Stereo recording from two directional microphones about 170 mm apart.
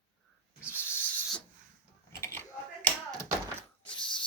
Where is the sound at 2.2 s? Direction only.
15° left (ahead or behind).